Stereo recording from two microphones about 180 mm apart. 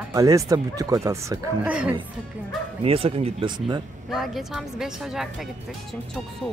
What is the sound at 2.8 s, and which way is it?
Speech, 30° right (ahead or behind).